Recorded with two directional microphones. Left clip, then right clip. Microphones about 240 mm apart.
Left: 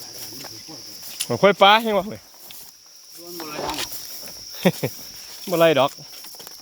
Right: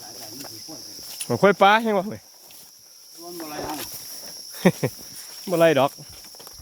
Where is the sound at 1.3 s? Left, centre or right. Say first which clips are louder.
Left 2 dB; centre.